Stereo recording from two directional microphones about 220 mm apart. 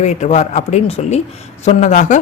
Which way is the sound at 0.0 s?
30° left (ahead or behind).